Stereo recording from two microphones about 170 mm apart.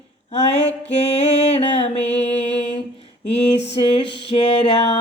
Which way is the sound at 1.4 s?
35° left (ahead or behind).